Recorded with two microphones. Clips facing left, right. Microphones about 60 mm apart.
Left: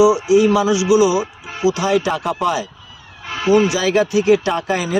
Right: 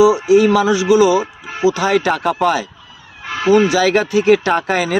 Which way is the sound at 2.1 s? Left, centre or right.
Right.